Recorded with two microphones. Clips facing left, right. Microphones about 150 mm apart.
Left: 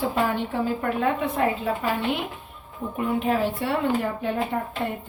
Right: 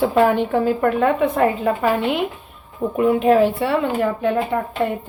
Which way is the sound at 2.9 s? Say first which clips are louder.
Right 9 dB; 90° right.